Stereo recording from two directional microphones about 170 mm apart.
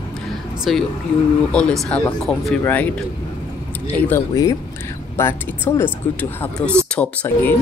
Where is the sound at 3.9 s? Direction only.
15° left (ahead or behind).